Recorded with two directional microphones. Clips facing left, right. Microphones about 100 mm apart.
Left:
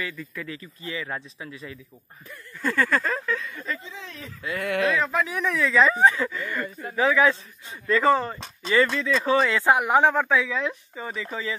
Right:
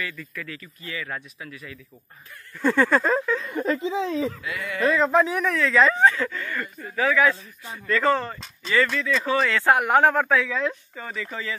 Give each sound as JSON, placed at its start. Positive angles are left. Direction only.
{"t": 0.0, "sound": "speech", "side_deg": 25}
{"t": 2.6, "sound": "a sound", "side_deg": -5}
{"t": 3.4, "sound": "speech", "side_deg": -65}
{"t": 4.6, "sound": "speech", "side_deg": 65}
{"t": 5.0, "sound": "speech", "side_deg": -30}
{"t": 5.4, "sound": "a sound", "side_deg": 0}
{"t": 5.9, "sound": "speech", "side_deg": 15}
{"t": 8.6, "sound": "speech", "side_deg": 25}
{"t": 9.6, "sound": "speech", "side_deg": 5}
{"t": 11.1, "sound": "speech", "side_deg": 20}